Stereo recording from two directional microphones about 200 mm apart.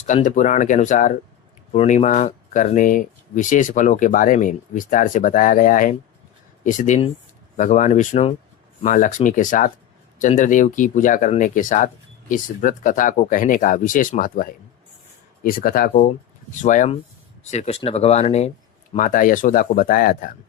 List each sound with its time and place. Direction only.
0.3 s speech: 40° left (ahead or behind)